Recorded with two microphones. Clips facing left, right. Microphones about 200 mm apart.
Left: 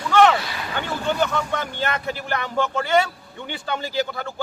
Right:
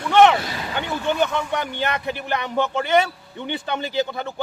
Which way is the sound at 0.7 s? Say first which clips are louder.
Right 1 dB; 20° right (ahead or behind).